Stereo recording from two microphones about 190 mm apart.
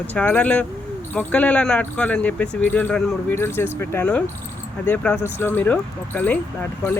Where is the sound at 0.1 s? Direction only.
10° left (ahead or behind).